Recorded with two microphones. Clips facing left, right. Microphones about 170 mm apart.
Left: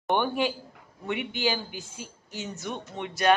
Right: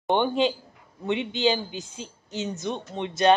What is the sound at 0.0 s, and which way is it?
Speech, 20° right (ahead or behind).